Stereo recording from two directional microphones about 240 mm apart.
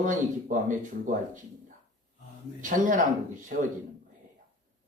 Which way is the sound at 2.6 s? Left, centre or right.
Right.